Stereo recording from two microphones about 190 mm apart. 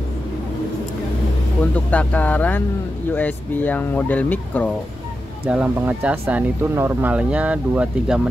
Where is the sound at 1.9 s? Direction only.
5° left (ahead or behind).